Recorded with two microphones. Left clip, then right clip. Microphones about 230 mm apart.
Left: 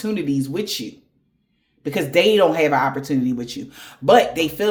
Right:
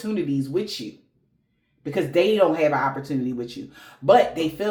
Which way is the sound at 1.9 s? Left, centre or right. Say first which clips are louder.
Left 4 dB; left.